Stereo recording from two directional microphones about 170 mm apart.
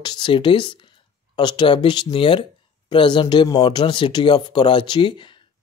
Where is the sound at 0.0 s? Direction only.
25° left (ahead or behind).